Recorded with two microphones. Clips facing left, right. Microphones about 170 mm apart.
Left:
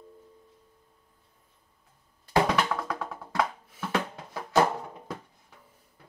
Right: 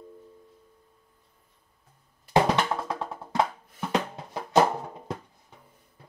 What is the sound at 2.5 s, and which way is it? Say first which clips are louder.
Music: right 1 dB; 25° right (ahead or behind).